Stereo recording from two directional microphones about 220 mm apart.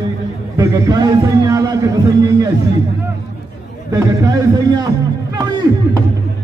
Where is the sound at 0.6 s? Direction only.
15° right (ahead or behind).